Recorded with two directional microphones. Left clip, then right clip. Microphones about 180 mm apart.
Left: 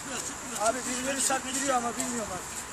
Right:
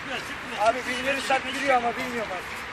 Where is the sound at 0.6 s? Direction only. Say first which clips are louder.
Right 5 dB; 65° left (ahead or behind).